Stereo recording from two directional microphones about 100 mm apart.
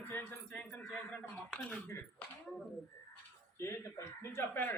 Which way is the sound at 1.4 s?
10° left (ahead or behind).